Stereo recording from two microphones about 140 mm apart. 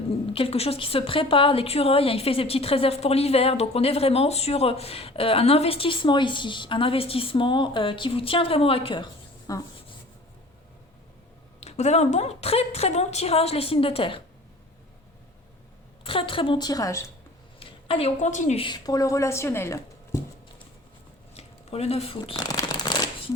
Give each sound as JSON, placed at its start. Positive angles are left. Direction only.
{"t": 0.3, "sound": "a woman's voice", "side_deg": 40}
{"t": 9.5, "sound": "a woman's voice", "side_deg": 25}
{"t": 11.6, "sound": "speech", "side_deg": 50}
{"t": 16.0, "sound": "a woman's voice", "side_deg": 40}
{"t": 17.6, "sound": "a woman's voice", "side_deg": 40}
{"t": 18.6, "sound": "a woman's voice", "side_deg": 30}
{"t": 21.3, "sound": "speech", "side_deg": 45}
{"t": 22.4, "sound": "shuffling cards", "side_deg": 25}